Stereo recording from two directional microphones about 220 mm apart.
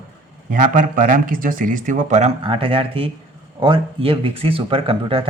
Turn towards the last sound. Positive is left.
turn(degrees=-25)  # may be behind; listen again after turning